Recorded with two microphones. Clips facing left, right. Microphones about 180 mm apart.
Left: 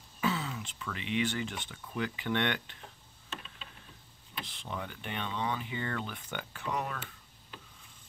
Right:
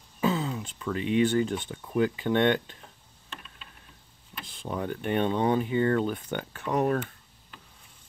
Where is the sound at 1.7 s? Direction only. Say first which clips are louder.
Right 10 dB; 35° right (ahead or behind).